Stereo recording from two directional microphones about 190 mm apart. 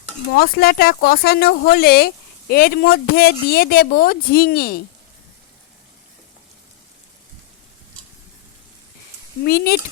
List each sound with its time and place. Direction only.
0.3 s speech: 50° left (ahead or behind)
9.4 s speech: 55° left (ahead or behind)